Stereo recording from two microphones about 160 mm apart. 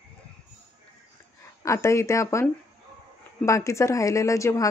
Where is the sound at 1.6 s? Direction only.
20° left (ahead or behind).